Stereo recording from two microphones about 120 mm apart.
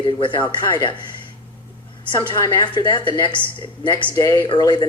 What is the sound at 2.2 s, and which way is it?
Speech, 40° left (ahead or behind).